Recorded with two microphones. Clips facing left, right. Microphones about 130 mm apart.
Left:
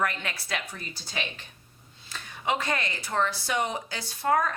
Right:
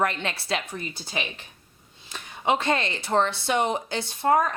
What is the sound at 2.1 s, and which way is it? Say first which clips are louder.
Speech: right 5 dB; 25° right (ahead or behind).